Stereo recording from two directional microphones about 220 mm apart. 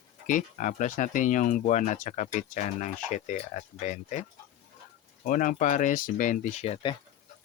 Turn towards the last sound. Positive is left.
turn(degrees=25)  # may be behind; listen again after turning